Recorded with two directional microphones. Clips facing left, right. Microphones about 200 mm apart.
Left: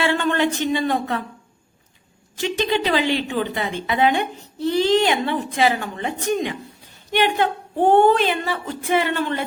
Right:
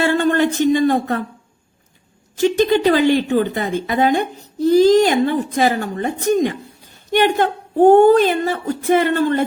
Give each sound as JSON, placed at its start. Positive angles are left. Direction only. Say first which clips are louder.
{"t": 0.0, "sound": "a man's voice", "louder": "right 4 dB", "side_deg": -40}
{"t": 2.4, "sound": "a woman's voice", "louder": "right 7 dB", "side_deg": -45}